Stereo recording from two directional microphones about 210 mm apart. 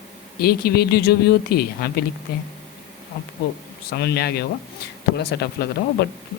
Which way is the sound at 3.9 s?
50° left (ahead or behind).